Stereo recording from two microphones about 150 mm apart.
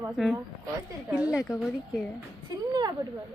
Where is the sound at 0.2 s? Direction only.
Centre (ahead or behind).